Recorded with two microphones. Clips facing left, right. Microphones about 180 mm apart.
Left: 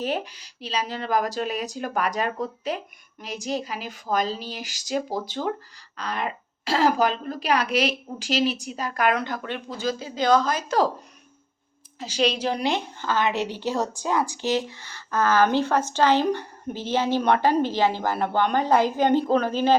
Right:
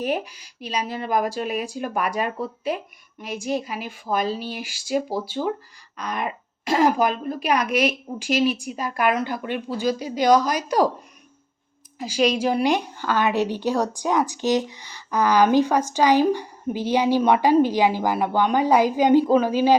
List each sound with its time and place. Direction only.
0.0 s a woman's voice: 10° right (ahead or behind)
1.5 s speech: 40° left (ahead or behind)
1.7 s a woman's voice: 10° right (ahead or behind)
3.9 s a woman's voice: 10° right (ahead or behind)
4.4 s speech: 40° left (ahead or behind)
4.9 s a woman's voice: 10° right (ahead or behind)
7.7 s speech: 35° left (ahead or behind)
8.6 s a woman's voice: 10° right (ahead or behind)
11.9 s a woman's voice: 10° right (ahead or behind)